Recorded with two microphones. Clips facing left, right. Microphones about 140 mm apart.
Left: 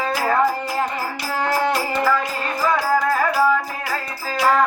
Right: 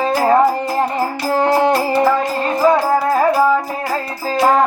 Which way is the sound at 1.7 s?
35° right (ahead or behind).